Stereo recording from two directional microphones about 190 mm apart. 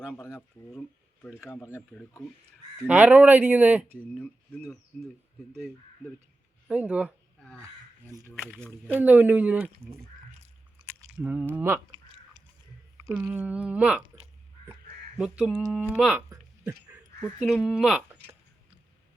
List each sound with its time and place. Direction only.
0.1 s speech: 10° left (ahead or behind)
2.8 s speech: 10° right (ahead or behind)
4.0 s speech: 5° left (ahead or behind)
6.7 s speech: 5° right (ahead or behind)
8.1 s speech: 10° left (ahead or behind)
8.6 s speech: 10° right (ahead or behind)
11.2 s speech: 10° right (ahead or behind)
12.0 s a sound: 25° right (ahead or behind)
13.0 s speech: 10° right (ahead or behind)
15.2 s speech: 5° right (ahead or behind)